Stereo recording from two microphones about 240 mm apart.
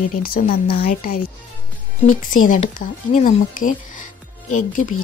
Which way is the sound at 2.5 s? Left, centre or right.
Left.